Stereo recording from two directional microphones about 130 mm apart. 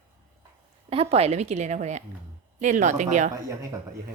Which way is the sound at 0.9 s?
45° right (ahead or behind).